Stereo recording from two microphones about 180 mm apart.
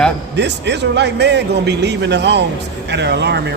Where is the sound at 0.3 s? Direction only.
70° right (ahead or behind).